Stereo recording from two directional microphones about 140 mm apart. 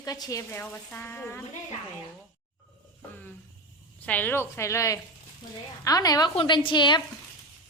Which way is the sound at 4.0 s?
10° left (ahead or behind).